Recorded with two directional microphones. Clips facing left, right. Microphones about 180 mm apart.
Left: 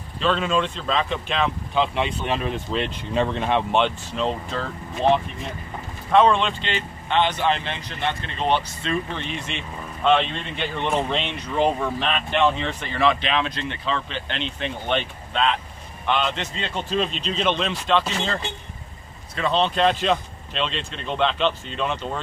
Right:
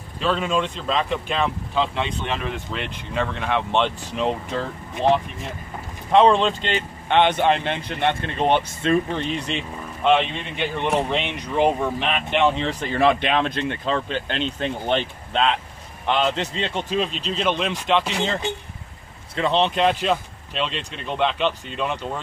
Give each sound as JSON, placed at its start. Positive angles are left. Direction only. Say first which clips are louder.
{"t": 0.2, "sound": "speech", "louder": "even", "side_deg": -10}
{"t": 2.0, "sound": "speech", "louder": "left 2 dB", "side_deg": 15}
{"t": 4.0, "sound": "speech", "louder": "right 1 dB", "side_deg": -15}
{"t": 6.1, "sound": "speech", "louder": "right 2 dB", "side_deg": -35}
{"t": 10.0, "sound": "speech", "louder": "right 1 dB", "side_deg": -10}
{"t": 12.5, "sound": "a man's voice", "louder": "right 4 dB", "side_deg": -35}
{"t": 17.2, "sound": "speech", "louder": "even", "side_deg": -5}